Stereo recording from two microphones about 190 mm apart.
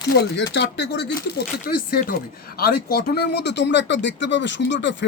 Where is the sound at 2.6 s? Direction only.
55° left (ahead or behind).